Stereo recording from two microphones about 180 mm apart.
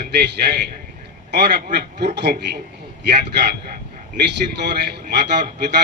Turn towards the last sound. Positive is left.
turn(degrees=-65)  # may be behind; listen again after turning